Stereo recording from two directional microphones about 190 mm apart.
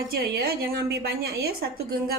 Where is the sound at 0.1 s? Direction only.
50° right (ahead or behind).